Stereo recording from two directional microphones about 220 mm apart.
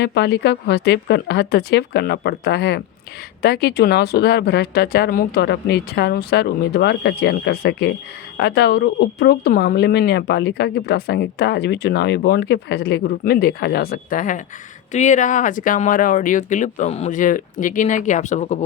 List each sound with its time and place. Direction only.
0.0 s speech: 50° left (ahead or behind); by 18.6 s 30° left (ahead or behind)